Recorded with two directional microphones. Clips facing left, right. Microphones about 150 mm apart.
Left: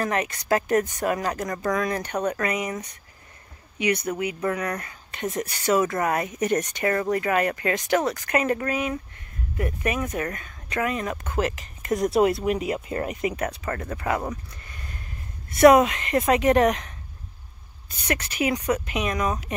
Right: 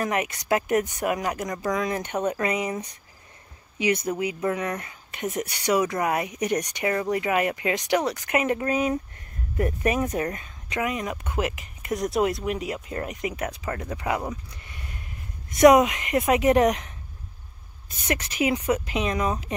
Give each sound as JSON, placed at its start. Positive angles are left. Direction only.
{"t": 0.0, "sound": "speech", "side_deg": -15}
{"t": 9.6, "sound": "speech", "side_deg": -35}
{"t": 10.8, "sound": "speech", "side_deg": -15}
{"t": 11.9, "sound": "speech", "side_deg": 0}
{"t": 13.5, "sound": "speech", "side_deg": -10}
{"t": 14.6, "sound": "a sound", "side_deg": -15}
{"t": 15.5, "sound": "speech", "side_deg": -15}
{"t": 18.0, "sound": "speech", "side_deg": -25}